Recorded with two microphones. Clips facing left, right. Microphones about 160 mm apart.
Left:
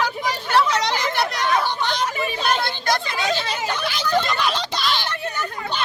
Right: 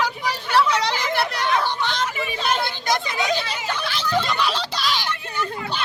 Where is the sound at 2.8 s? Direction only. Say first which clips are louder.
Even; 20° right (ahead or behind).